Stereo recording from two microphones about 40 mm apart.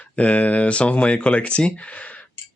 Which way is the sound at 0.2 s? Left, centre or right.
Left.